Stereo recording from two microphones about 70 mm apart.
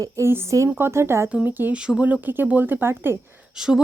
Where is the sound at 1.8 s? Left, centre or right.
Centre; by 3.1 s right.